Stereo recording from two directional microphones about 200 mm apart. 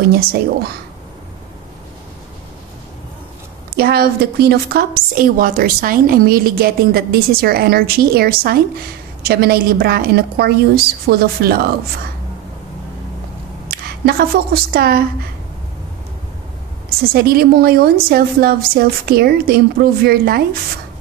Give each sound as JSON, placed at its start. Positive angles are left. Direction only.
{"t": 0.1, "sound": "a woman's voice", "side_deg": -50}
{"t": 3.7, "sound": "a woman's voice", "side_deg": -50}
{"t": 13.7, "sound": "speech", "side_deg": -50}
{"t": 17.1, "sound": "a woman's voice", "side_deg": -50}